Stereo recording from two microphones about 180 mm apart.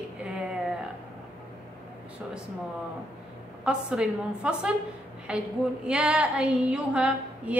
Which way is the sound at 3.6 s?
5° right (ahead or behind).